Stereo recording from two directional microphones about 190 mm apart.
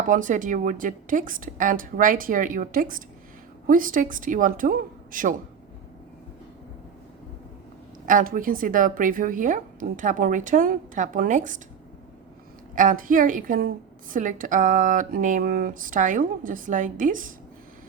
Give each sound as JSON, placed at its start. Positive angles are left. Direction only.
{"t": 0.1, "sound": "a woman's voice", "side_deg": -45}
{"t": 8.0, "sound": "a woman's voice", "side_deg": -45}
{"t": 12.7, "sound": "a woman's voice", "side_deg": -45}